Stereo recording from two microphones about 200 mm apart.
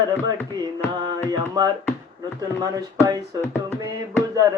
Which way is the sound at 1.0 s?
20° right (ahead or behind).